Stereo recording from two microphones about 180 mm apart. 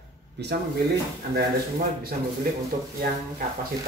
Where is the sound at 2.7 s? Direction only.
50° right (ahead or behind).